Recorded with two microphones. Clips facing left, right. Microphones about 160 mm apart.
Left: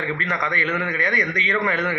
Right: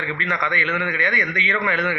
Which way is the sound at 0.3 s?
40° left (ahead or behind).